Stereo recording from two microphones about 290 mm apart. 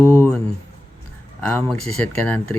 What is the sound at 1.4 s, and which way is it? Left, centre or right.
Speech, centre.